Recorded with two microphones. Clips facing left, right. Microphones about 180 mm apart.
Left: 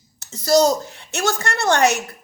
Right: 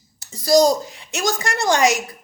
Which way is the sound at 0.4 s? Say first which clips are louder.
Right 1 dB; 15° right (ahead or behind).